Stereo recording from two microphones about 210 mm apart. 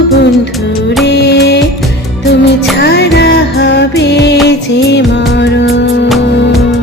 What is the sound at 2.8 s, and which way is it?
Music, 50° left (ahead or behind).